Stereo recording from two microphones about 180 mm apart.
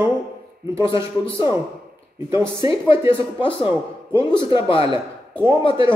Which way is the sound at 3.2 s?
30° left (ahead or behind).